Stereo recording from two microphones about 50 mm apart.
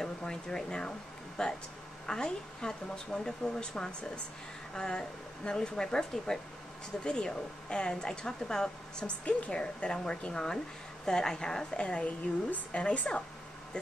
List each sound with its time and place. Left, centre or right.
0.0 s a woman's voice: centre